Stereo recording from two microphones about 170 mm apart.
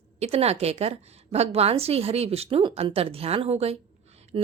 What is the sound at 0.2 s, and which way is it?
A woman's voice, 40° right (ahead or behind).